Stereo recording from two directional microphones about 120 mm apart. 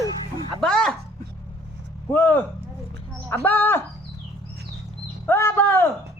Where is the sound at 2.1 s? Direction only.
15° left (ahead or behind).